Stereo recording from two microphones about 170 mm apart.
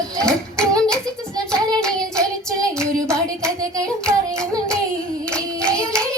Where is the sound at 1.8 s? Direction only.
5° left (ahead or behind).